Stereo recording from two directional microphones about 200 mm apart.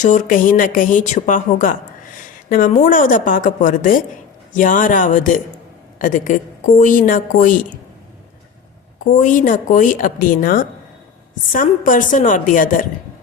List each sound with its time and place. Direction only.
0.0 s a woman's voice: 40° left (ahead or behind)
9.1 s a woman's voice: 40° left (ahead or behind)